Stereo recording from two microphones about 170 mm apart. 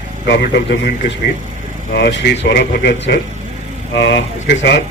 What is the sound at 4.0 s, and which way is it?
Speech, 90° left.